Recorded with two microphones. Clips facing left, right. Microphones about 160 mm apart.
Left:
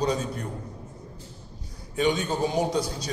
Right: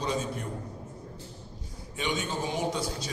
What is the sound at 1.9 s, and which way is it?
A man's voice, 40° left (ahead or behind).